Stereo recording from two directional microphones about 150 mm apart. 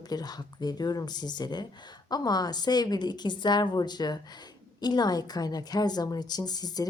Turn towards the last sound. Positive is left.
turn(degrees=25)  # may be behind; listen again after turning